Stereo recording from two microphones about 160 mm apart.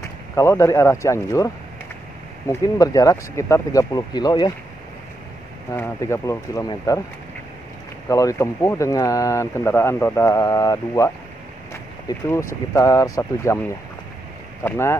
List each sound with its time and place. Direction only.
0.4 s speech: 20° left (ahead or behind)
5.7 s speech: 15° left (ahead or behind)
8.1 s speech: 20° left (ahead or behind)
12.1 s speech: 25° left (ahead or behind)
14.6 s speech: 15° left (ahead or behind)